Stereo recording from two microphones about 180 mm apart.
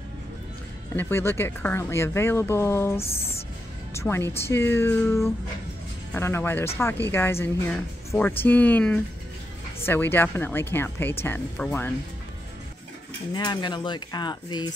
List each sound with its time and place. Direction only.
0.9 s speech: 10° left (ahead or behind)
3.0 s speech: 35° left (ahead or behind)
3.9 s a woman's voice: 15° left (ahead or behind)
13.3 s speech: 25° left (ahead or behind)